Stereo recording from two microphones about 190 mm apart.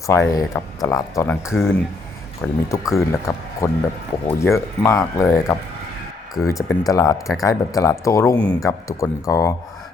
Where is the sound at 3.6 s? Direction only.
15° left (ahead or behind).